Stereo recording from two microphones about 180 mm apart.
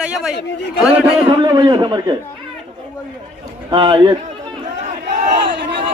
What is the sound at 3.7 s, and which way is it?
Speech, 25° right (ahead or behind).